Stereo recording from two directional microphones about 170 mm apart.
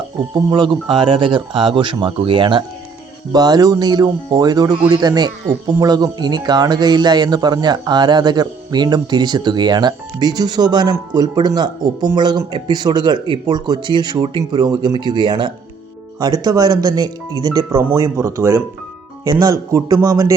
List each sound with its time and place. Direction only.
0.3 s a man's voice: 30° right (ahead or behind)